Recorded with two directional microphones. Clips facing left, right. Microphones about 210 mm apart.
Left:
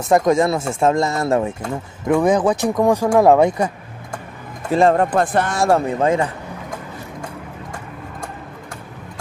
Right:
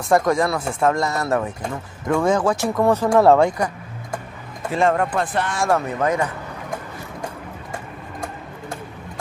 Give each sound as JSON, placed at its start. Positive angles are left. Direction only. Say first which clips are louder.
{"t": 0.1, "sound": "speech", "louder": "left 3 dB", "side_deg": 20}
{"t": 4.7, "sound": "speech", "louder": "left 4 dB", "side_deg": 35}
{"t": 5.2, "sound": "speech", "louder": "left 5 dB", "side_deg": 50}